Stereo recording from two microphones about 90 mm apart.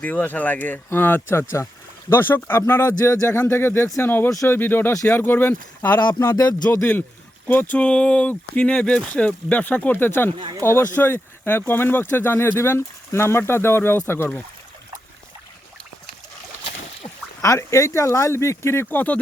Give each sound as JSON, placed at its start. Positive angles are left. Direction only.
{"t": 0.0, "sound": "speech", "side_deg": 20}
{"t": 7.4, "sound": "speech", "side_deg": 20}
{"t": 17.4, "sound": "speech", "side_deg": 35}